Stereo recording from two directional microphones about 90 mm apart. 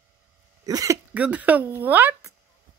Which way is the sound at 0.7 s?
40° right (ahead or behind).